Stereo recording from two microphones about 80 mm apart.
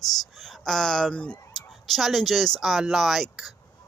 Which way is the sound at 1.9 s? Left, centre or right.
Centre.